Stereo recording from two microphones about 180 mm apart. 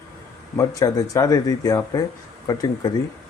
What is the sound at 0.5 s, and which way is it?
Speech, 20° left (ahead or behind).